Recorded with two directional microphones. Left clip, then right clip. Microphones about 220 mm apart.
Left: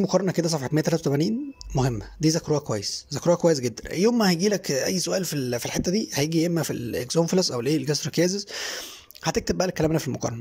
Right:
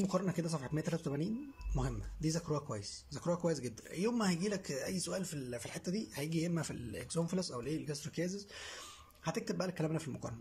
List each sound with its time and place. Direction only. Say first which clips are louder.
0.0 s speech: left 14 dB; 35° left (ahead or behind)